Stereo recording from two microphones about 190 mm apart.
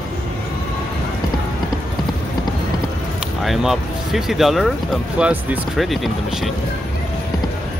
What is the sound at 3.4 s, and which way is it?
Speech, centre (ahead or behind).